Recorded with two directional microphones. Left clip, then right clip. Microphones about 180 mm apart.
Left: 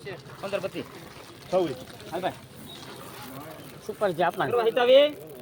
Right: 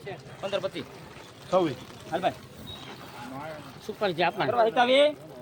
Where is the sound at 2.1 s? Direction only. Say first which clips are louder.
Right 2 dB; 40° right (ahead or behind).